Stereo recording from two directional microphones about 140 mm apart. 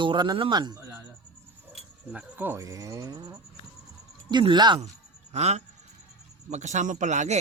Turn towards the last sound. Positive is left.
turn(degrees=-60)  # may be behind; listen again after turning